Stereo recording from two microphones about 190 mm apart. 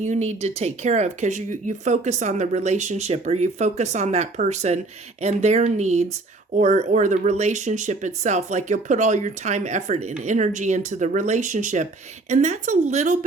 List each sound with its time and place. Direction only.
0.0 s speech: 35° right (ahead or behind)